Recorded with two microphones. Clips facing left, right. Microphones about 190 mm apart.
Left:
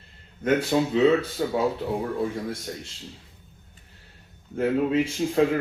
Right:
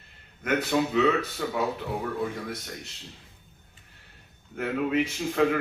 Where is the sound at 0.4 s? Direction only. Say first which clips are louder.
Left 3 dB; 30° left (ahead or behind).